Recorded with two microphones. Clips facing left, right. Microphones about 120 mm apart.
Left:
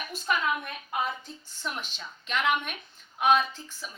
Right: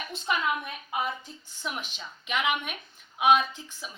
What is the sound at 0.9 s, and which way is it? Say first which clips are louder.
A woman's voice: even; 10° right (ahead or behind).